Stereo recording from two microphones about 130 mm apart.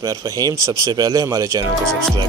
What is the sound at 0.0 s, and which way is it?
Speech, 25° right (ahead or behind).